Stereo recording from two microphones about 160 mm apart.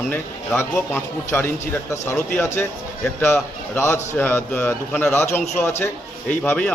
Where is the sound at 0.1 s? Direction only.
15° left (ahead or behind).